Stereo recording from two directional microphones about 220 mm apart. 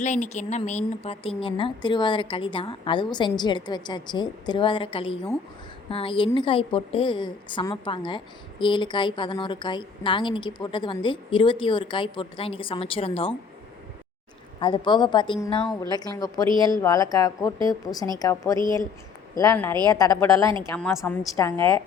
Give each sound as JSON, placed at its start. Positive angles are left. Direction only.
{"t": 0.0, "sound": "a woman's voice", "side_deg": 35}
{"t": 14.6, "sound": "a woman's voice", "side_deg": 20}
{"t": 17.9, "sound": "speech", "side_deg": 0}
{"t": 18.2, "sound": "a woman's voice", "side_deg": 15}